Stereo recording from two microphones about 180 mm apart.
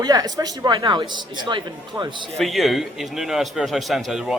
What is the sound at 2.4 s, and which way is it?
A man's voice, centre (ahead or behind).